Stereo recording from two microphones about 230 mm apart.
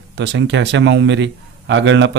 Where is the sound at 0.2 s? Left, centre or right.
Right.